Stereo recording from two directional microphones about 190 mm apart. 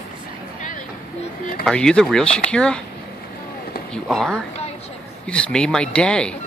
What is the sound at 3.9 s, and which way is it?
Speech, 5° left (ahead or behind).